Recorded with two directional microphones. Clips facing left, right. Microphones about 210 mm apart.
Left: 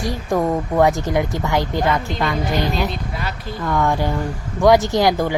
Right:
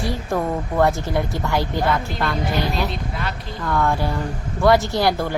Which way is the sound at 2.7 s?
Centre (ahead or behind).